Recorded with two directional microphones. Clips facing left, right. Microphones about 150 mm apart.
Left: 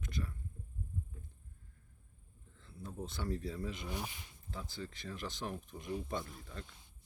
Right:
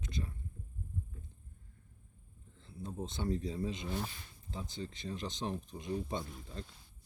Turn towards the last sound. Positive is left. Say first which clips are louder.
# right 2 dB
turn(degrees=-20)  # may be behind; listen again after turning